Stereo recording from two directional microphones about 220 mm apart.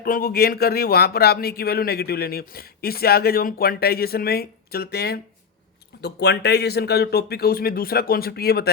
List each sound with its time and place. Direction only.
0.0 s speech: 40° left (ahead or behind)